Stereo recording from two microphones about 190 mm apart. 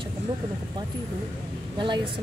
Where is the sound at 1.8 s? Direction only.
25° right (ahead or behind).